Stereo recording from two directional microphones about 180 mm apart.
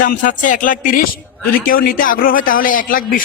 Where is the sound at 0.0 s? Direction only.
50° left (ahead or behind).